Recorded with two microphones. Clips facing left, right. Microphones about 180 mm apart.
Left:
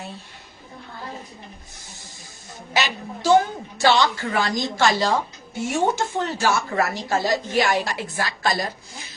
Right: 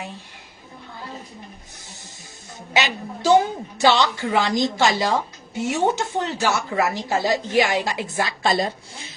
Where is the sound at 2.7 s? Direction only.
15° right (ahead or behind).